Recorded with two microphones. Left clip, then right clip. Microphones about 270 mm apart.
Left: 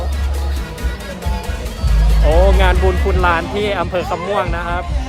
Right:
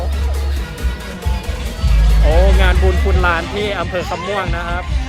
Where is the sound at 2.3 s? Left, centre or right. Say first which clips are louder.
Left 2 dB; centre.